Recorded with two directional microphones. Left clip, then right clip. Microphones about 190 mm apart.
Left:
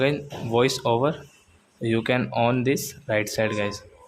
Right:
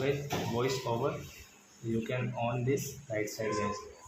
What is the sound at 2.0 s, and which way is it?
Speech, 55° left (ahead or behind).